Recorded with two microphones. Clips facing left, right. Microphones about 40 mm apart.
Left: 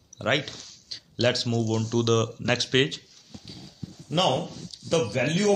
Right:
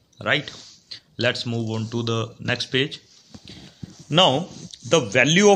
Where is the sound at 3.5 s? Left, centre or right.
Right.